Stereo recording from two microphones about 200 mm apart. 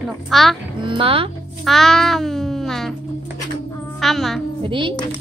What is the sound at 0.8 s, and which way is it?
Speech, 25° right (ahead or behind).